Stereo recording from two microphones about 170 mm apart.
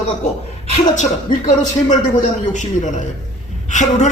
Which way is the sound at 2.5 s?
45° left (ahead or behind).